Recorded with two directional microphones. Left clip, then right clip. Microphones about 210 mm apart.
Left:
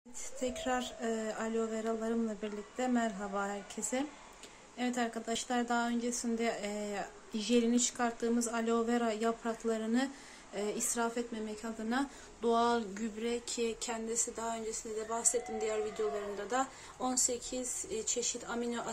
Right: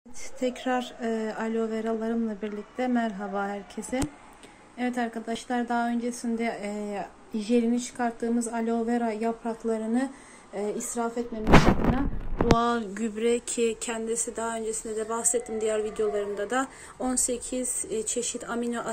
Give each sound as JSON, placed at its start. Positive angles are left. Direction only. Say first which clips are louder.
{"t": 0.4, "sound": "a woman's voice", "louder": "right 7 dB", "side_deg": -10}
{"t": 12.5, "sound": "a woman's voice", "louder": "right 5 dB", "side_deg": 0}